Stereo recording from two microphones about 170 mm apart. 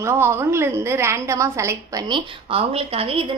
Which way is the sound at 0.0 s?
15° right (ahead or behind).